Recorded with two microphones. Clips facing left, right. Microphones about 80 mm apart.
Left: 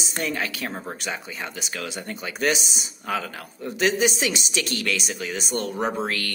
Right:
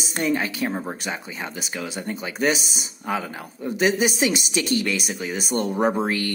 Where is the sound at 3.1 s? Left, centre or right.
Centre.